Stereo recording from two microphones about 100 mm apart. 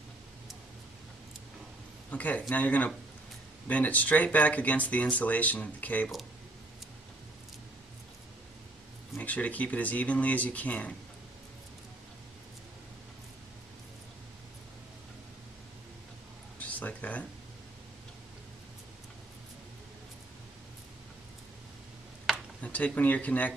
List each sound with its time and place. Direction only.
2.0 s speech: 15° left (ahead or behind)
9.2 s speech: 15° left (ahead or behind)
16.5 s a sound: 15° left (ahead or behind)
22.6 s speech: 15° left (ahead or behind)